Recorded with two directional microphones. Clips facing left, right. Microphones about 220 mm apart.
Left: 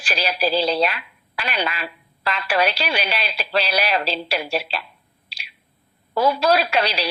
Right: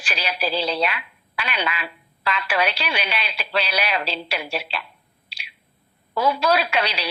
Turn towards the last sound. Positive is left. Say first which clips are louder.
# left 2 dB
turn(degrees=35)  # may be behind; listen again after turning